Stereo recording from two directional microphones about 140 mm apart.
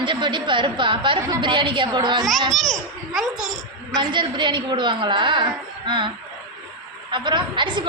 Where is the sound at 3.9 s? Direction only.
35° right (ahead or behind).